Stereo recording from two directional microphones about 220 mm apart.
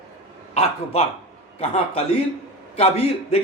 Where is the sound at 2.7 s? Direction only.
25° left (ahead or behind).